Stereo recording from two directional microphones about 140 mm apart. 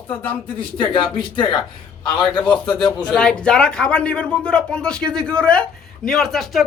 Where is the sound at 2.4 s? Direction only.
35° left (ahead or behind).